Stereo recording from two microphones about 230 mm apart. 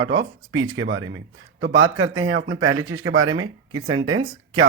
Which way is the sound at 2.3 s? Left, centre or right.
Right.